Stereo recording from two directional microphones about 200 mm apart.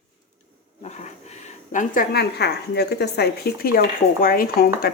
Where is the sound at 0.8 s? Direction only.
35° left (ahead or behind).